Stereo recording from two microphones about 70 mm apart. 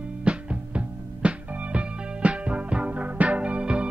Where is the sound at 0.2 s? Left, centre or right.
Centre.